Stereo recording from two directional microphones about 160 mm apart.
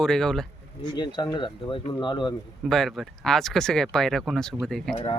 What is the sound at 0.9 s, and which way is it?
Speech, 25° left (ahead or behind).